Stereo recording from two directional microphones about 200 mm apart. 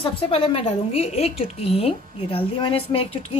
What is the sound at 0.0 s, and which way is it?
Speech, 25° left (ahead or behind).